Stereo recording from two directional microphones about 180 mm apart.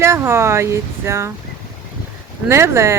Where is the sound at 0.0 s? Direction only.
15° right (ahead or behind).